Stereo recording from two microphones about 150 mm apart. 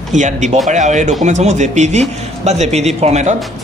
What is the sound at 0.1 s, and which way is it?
A man's voice, 55° right (ahead or behind).